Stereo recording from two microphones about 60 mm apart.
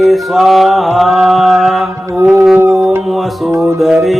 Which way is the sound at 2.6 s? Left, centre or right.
Right.